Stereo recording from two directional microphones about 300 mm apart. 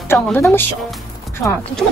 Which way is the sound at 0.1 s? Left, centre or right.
Centre.